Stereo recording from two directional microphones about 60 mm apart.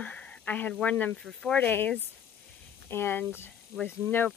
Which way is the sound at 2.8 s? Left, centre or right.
Left.